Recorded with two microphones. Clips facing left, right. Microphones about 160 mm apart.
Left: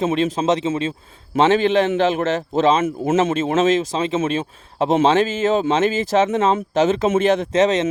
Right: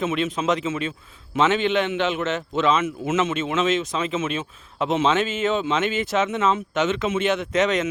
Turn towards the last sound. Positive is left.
turn(degrees=30)  # may be behind; listen again after turning